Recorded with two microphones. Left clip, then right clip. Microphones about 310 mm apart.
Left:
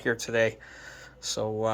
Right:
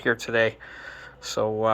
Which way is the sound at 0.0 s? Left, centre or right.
Centre.